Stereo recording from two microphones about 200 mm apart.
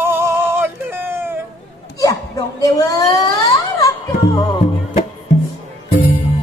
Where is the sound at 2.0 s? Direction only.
15° left (ahead or behind).